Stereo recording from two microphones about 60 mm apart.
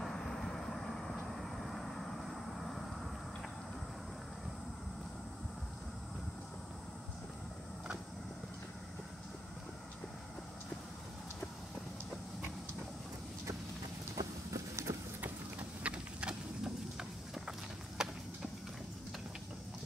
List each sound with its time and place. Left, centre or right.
0.0 s vehicle: centre
14.1 s clip-clop: right
15.8 s a sound: centre